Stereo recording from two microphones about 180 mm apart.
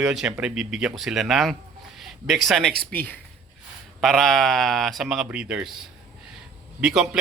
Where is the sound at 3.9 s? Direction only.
Centre (ahead or behind).